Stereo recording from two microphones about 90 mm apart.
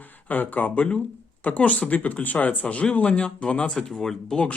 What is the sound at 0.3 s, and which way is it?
Speech, 20° left (ahead or behind).